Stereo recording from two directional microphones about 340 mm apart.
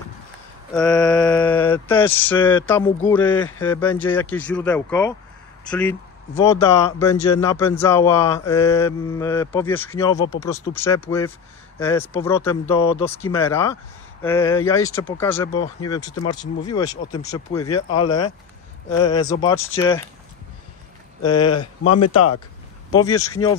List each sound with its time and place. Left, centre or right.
0.7 s mantra: centre
3.2 s speech: centre
6.3 s mantra: centre
21.2 s mantra: centre
21.8 s speech: left
22.9 s mantra: centre